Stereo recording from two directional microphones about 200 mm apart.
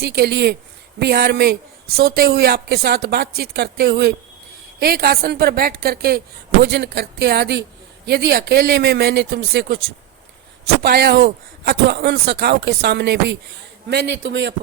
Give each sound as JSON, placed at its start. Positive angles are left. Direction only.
{"t": 0.0, "sound": "speech", "side_deg": -55}
{"t": 10.8, "sound": "speech", "side_deg": -55}